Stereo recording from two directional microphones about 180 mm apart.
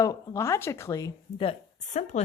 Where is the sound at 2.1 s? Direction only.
40° left (ahead or behind).